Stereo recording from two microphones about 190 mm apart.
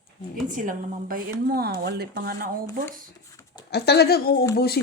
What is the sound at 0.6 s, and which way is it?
Speech, 45° right (ahead or behind).